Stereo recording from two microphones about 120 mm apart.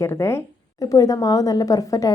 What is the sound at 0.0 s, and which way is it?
A woman's voice, 25° left (ahead or behind).